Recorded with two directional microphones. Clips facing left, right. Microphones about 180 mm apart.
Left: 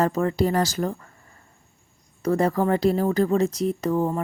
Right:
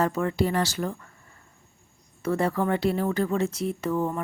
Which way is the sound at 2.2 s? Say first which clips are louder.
Left 4 dB; 40° left (ahead or behind).